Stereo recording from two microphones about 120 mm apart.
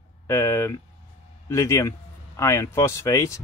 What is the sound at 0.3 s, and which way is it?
Speech, 20° left (ahead or behind).